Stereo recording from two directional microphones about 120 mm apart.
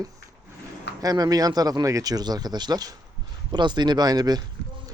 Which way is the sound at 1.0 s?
30° right (ahead or behind).